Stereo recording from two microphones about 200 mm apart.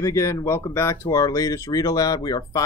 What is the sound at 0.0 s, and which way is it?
Speech, 15° left (ahead or behind).